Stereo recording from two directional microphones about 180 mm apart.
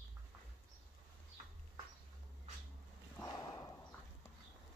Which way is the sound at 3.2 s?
15° left (ahead or behind).